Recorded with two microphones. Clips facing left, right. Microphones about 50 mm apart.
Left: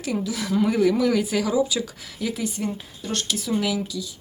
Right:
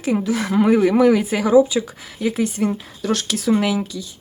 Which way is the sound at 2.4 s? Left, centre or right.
Right.